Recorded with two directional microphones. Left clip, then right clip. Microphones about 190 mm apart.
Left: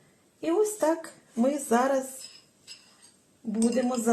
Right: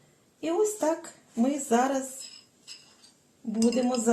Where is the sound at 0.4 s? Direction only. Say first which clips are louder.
Left 1 dB; 25° left (ahead or behind).